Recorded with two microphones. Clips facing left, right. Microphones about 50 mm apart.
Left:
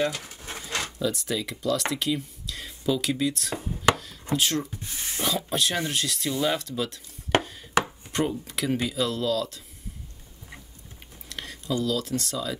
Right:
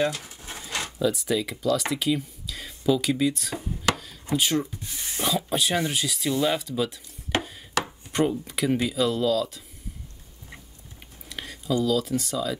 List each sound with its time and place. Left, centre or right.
0.1 s a sound: left
0.9 s speech: centre
3.9 s chopping: centre
5.1 s speech: centre
7.8 s chopping: centre
11.2 s speech: centre